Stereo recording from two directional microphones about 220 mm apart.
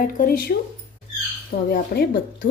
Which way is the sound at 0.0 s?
40° left (ahead or behind).